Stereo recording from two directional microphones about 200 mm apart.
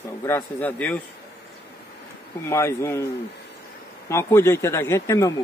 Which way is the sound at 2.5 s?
15° left (ahead or behind).